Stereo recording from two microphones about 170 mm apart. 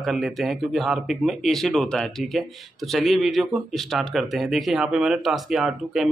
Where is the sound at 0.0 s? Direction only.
Centre (ahead or behind).